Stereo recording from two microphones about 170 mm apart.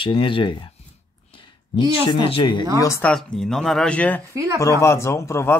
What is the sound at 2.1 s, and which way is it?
Speech, 30° left (ahead or behind).